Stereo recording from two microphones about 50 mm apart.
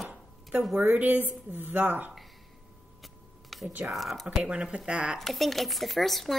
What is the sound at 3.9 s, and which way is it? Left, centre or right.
Speech, centre.